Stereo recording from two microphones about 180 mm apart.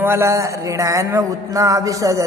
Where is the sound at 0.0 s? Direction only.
15° right (ahead or behind).